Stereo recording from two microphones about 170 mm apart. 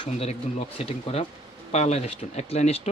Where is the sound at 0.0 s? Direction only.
40° left (ahead or behind).